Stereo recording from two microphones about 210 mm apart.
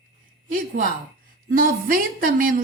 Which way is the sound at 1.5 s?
40° right (ahead or behind).